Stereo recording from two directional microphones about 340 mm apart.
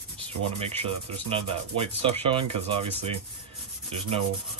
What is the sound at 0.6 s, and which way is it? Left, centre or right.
Speech, centre.